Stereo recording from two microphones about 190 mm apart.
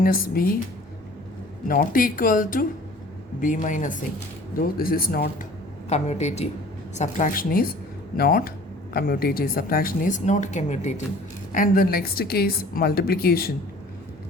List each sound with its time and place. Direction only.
0.0 s speech: 50° left (ahead or behind)
1.6 s speech: 50° left (ahead or behind)
5.9 s speech: 35° left (ahead or behind); by 13.5 s 50° left (ahead or behind)